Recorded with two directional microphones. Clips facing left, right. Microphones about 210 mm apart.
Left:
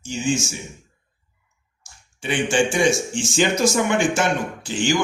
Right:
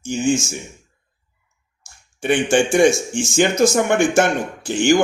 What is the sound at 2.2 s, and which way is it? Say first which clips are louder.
Speech: right 4 dB; 55° right (ahead or behind).